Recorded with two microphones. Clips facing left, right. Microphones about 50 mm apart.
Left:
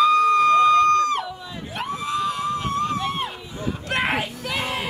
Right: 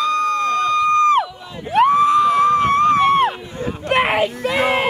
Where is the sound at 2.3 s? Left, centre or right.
Right.